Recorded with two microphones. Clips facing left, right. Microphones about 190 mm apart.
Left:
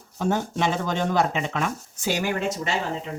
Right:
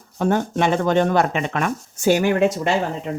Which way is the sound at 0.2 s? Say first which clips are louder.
Right 5 dB; 60° right (ahead or behind).